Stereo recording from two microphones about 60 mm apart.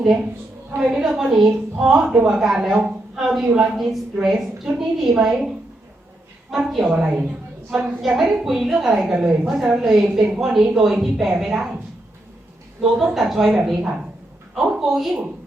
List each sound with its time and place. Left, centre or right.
0.0 s a woman's voice: centre
6.5 s a woman's voice: centre
6.9 s a woman's voice: centre
9.6 s a woman's voice: centre
13.1 s a woman's voice: centre